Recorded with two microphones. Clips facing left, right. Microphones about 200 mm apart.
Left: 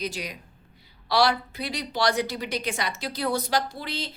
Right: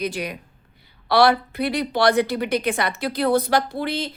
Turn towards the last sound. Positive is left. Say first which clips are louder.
# right 7 dB
turn(degrees=-55)  # may be behind; listen again after turning